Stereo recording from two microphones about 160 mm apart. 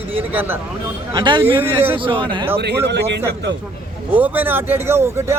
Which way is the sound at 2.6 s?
90° right.